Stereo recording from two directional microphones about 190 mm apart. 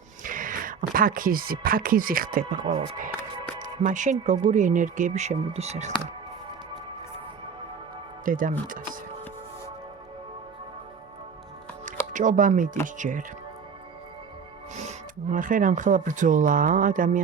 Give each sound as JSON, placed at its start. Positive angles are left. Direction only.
{"t": 0.2, "sound": "speech", "side_deg": -45}
{"t": 8.2, "sound": "speech", "side_deg": -45}
{"t": 12.1, "sound": "speech", "side_deg": -45}
{"t": 14.8, "sound": "speech", "side_deg": -40}